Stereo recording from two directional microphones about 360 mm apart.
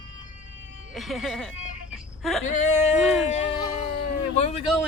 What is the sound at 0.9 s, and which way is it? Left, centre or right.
Speech, centre.